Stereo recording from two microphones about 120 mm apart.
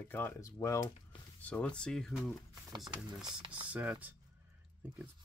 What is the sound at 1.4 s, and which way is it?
Speech, 10° left (ahead or behind).